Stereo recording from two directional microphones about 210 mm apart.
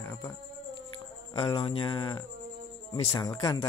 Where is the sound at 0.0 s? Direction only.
10° left (ahead or behind).